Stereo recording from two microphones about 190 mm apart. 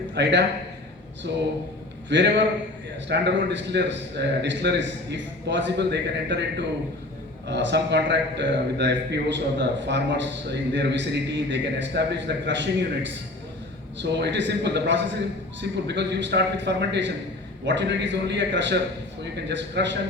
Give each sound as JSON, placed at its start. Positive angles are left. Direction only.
{"t": 0.1, "sound": "a man's voice", "side_deg": -65}